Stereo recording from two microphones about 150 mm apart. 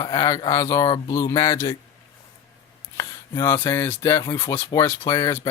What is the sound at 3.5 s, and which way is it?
Speech, 15° left (ahead or behind).